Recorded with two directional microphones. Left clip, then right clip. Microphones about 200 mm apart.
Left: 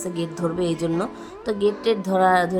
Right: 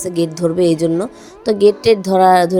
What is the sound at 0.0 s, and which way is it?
Speech, 25° right (ahead or behind).